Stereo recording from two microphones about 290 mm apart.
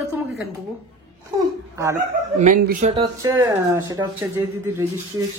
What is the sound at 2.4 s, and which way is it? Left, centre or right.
Speech, right.